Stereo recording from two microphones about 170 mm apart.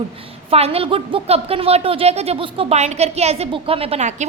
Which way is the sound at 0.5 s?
35° right (ahead or behind).